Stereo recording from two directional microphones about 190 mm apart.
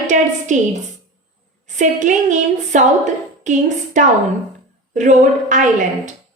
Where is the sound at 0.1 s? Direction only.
40° right (ahead or behind).